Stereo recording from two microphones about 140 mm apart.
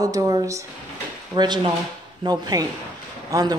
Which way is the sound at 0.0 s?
25° right (ahead or behind).